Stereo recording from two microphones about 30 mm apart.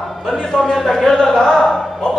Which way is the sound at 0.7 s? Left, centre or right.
Centre.